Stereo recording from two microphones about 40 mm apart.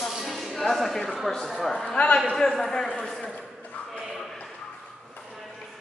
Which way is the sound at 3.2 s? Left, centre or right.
Left.